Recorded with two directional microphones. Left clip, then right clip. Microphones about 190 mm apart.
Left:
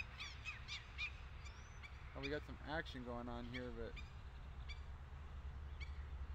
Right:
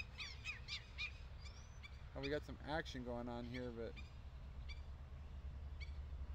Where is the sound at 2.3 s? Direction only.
35° right (ahead or behind).